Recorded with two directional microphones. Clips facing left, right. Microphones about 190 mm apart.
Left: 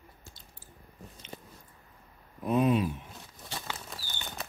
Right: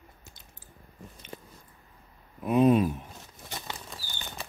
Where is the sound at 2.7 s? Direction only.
45° right (ahead or behind).